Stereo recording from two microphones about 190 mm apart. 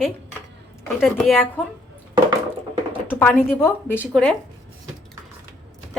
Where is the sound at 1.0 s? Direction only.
Centre (ahead or behind).